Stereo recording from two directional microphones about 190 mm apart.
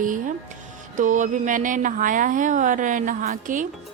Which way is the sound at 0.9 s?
40° right (ahead or behind).